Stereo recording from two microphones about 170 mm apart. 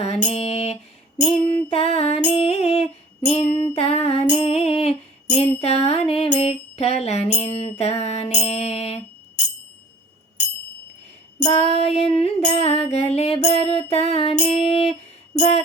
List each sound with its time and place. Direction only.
0.3 s a sound: 35° left (ahead or behind)
1.5 s music: 35° left (ahead or behind)
11.4 s music: 40° left (ahead or behind)